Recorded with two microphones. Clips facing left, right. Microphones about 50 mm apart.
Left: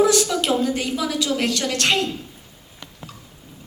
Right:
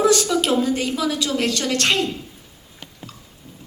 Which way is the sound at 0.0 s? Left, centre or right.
Centre.